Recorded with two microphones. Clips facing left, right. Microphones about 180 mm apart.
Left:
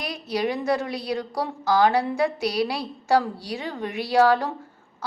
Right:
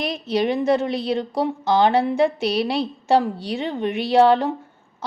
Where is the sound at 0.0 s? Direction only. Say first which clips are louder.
Right 5 dB; 25° right (ahead or behind).